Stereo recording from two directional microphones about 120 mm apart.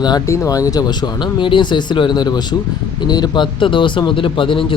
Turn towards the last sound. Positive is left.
turn(degrees=45)  # may be behind; listen again after turning